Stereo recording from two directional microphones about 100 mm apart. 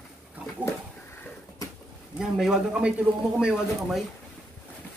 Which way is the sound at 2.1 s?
5° right (ahead or behind).